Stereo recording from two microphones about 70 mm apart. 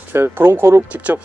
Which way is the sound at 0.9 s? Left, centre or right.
Right.